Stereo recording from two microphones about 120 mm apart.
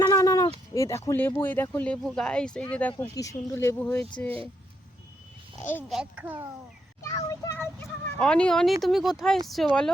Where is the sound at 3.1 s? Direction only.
30° left (ahead or behind).